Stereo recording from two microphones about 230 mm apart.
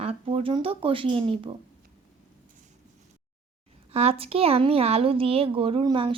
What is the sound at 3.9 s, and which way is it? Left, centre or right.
A woman's voice, right.